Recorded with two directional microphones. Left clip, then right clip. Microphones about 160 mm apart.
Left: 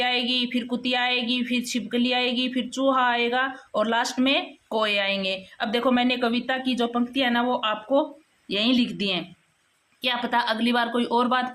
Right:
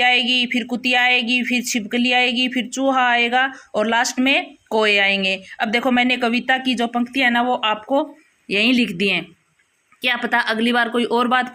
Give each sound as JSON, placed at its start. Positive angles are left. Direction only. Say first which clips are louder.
{"t": 0.0, "sound": "speech", "louder": "right 8 dB", "side_deg": -20}